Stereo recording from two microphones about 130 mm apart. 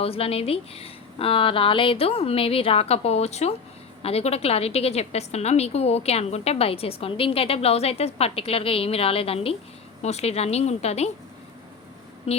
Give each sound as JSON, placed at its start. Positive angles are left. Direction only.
{"t": 0.0, "sound": "a woman's voice", "side_deg": 50}
{"t": 12.3, "sound": "a woman's voice", "side_deg": 50}